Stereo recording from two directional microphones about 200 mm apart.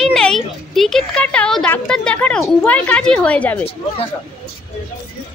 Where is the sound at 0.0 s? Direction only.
Centre (ahead or behind).